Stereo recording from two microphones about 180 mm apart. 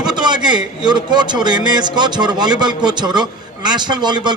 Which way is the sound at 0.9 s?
25° right (ahead or behind).